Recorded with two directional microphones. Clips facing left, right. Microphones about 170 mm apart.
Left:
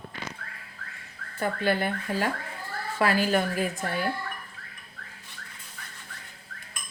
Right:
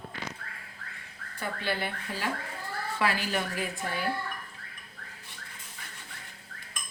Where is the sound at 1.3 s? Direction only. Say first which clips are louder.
Left 7 dB; 50° left (ahead or behind).